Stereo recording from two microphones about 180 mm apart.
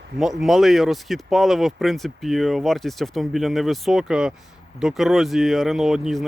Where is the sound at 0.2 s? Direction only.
Centre (ahead or behind).